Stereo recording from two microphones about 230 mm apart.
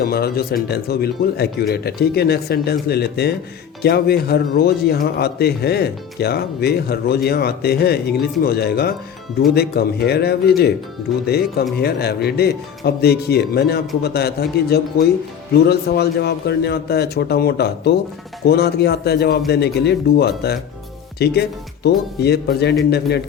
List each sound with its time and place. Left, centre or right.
0.0 s speech: left